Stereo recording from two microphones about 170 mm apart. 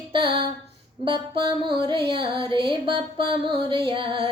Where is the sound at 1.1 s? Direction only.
30° right (ahead or behind).